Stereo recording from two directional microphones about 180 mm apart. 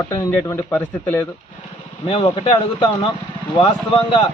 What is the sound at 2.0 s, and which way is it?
Speech, 30° left (ahead or behind).